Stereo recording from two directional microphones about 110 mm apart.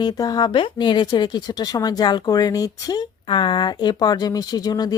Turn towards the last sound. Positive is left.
turn(degrees=35)  # may be behind; listen again after turning